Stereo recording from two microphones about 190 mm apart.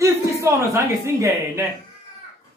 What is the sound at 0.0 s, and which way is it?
Speech, 15° right (ahead or behind).